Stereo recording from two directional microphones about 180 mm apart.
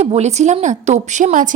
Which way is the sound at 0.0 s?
35° right (ahead or behind).